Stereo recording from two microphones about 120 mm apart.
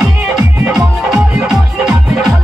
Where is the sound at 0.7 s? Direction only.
25° right (ahead or behind).